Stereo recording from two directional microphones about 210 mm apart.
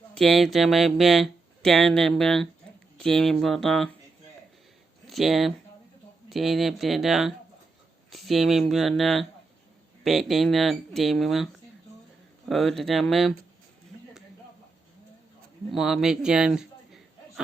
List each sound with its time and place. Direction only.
0.1 s speech: centre (ahead or behind)
5.0 s speech: centre (ahead or behind)
12.5 s speech: centre (ahead or behind)
15.7 s a man's voice: centre (ahead or behind)